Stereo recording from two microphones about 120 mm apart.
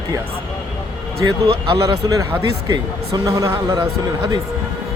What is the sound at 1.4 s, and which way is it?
Speech, 50° right (ahead or behind).